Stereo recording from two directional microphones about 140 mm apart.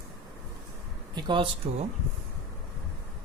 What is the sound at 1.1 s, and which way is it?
Speech, 35° right (ahead or behind).